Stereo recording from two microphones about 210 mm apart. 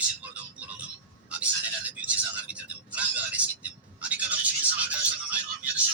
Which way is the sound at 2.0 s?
5° right (ahead or behind).